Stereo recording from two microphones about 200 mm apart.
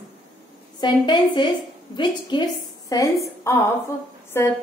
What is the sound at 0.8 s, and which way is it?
A woman's voice, 25° left (ahead or behind).